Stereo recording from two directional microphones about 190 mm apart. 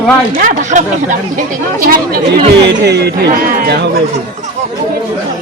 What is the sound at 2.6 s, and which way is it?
Speech, 60° right (ahead or behind).